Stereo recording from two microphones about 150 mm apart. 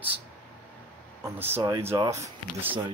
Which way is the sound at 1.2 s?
15° right (ahead or behind).